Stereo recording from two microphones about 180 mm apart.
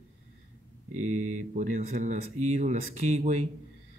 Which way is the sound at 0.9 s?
40° right (ahead or behind).